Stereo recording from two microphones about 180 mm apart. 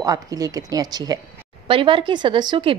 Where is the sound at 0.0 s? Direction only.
20° right (ahead or behind).